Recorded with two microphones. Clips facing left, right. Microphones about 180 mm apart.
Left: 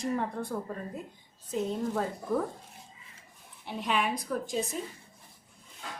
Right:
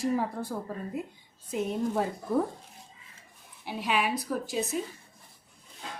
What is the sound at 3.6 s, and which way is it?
A woman's voice, 5° right (ahead or behind).